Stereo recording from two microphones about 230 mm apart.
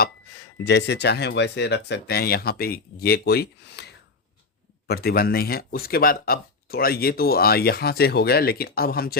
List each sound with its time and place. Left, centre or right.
0.6 s speech: left